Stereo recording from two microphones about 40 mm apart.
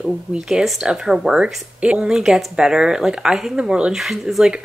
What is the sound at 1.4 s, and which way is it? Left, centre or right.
Speech, right.